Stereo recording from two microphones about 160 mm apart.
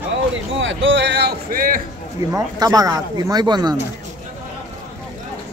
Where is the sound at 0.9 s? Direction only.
90° right; by 1.8 s 60° right (ahead or behind).